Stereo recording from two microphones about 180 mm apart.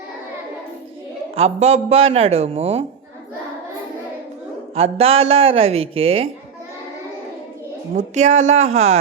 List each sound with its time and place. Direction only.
1.4 s speech: 35° right (ahead or behind)
4.7 s speech: 35° right (ahead or behind)
7.9 s speech: 40° right (ahead or behind)